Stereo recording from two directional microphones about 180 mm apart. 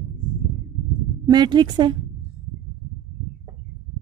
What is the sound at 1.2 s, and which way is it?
Speech, 25° right (ahead or behind).